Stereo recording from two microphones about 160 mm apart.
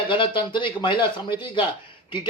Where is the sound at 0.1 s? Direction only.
30° left (ahead or behind).